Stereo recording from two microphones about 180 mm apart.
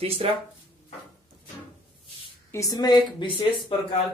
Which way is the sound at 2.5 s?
20° left (ahead or behind).